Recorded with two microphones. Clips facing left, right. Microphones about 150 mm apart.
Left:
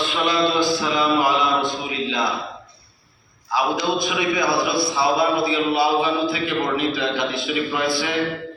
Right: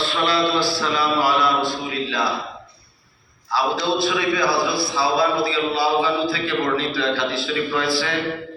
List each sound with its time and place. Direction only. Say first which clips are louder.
0.0 s mantra: even; 15° left (ahead or behind)
3.5 s a man's voice: even; 15° left (ahead or behind)